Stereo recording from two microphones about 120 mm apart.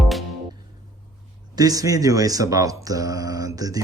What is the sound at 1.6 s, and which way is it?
Speech, 30° right (ahead or behind).